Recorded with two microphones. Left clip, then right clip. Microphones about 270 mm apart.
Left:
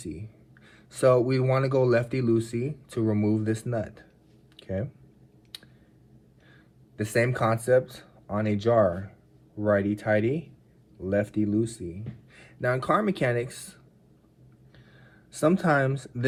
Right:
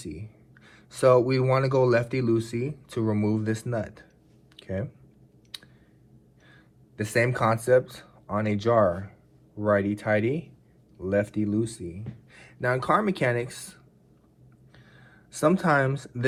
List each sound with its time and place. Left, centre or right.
0.0 s speech: centre
4.5 s a sound: centre
5.5 s clicking: centre
6.5 s speech: centre
15.0 s speech: centre